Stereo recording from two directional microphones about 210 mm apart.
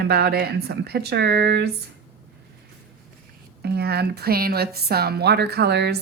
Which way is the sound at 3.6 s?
50° right (ahead or behind).